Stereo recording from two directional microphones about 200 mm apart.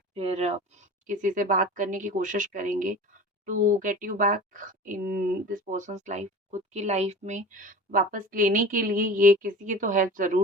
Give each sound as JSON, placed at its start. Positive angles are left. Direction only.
{"t": 0.1, "sound": "speech", "side_deg": -30}